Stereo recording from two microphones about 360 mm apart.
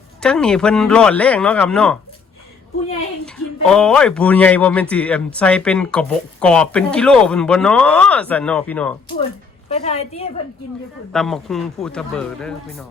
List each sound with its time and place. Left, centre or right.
0.2 s a man's voice: centre
3.2 s a man's voice: centre
9.7 s a woman's voice: centre
11.1 s a man's voice: centre